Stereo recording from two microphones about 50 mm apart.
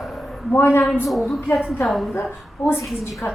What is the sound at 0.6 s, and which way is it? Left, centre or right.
Speech, left.